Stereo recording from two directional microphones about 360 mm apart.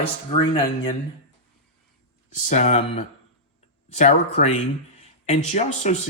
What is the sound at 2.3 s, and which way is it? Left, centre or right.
Speech, centre.